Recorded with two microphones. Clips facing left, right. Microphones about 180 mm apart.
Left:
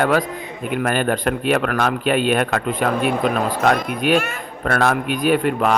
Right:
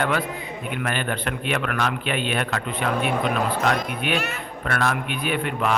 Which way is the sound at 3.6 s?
50° left (ahead or behind).